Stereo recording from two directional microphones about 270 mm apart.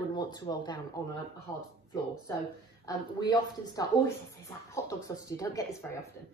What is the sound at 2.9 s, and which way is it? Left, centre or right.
A woman's voice, centre.